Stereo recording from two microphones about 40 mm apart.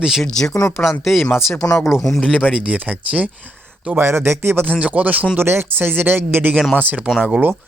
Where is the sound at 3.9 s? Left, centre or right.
Right.